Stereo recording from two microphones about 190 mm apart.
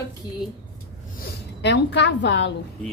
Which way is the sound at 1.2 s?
65° left (ahead or behind).